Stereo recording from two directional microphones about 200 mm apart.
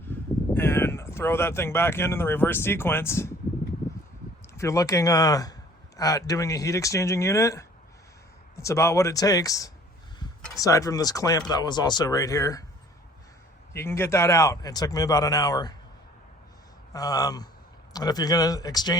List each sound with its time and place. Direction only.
0.5 s speech: 10° left (ahead or behind)
4.5 s speech: 15° left (ahead or behind)
13.7 s speech: 10° left (ahead or behind)
16.9 s speech: 20° left (ahead or behind)